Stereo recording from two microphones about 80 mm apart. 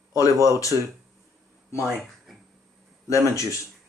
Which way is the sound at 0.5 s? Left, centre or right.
Left.